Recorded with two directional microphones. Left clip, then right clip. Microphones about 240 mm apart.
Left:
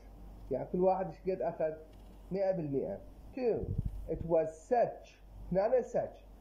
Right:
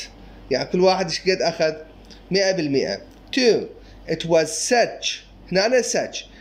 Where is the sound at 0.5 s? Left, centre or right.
Right.